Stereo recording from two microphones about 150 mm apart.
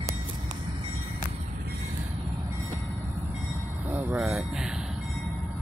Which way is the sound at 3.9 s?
10° right (ahead or behind).